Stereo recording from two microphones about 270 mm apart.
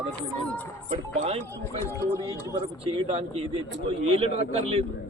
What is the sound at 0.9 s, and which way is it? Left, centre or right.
Speech, right.